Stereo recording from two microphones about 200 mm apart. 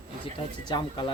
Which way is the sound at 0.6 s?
20° left (ahead or behind).